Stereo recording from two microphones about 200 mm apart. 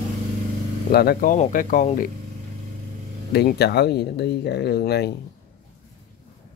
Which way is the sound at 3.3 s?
55° left (ahead or behind).